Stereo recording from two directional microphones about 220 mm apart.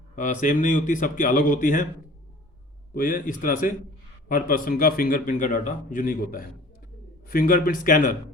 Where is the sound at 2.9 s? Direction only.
40° left (ahead or behind).